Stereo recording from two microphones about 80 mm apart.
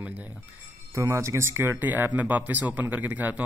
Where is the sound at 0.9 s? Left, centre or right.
Right.